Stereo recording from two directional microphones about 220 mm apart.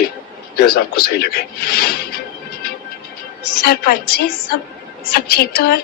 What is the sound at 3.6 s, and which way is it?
Speech, 45° left (ahead or behind).